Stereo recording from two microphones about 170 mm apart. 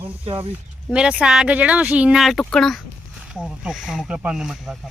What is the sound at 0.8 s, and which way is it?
Speech, 5° right (ahead or behind).